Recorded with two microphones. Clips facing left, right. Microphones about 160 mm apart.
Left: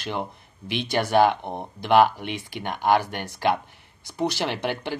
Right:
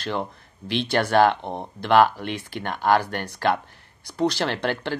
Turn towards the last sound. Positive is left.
turn(degrees=15)  # may be behind; listen again after turning